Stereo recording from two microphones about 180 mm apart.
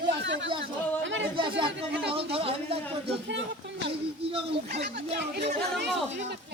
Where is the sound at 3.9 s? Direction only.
30° right (ahead or behind).